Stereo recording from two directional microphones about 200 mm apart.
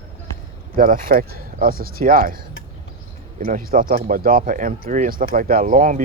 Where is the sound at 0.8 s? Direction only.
45° right (ahead or behind).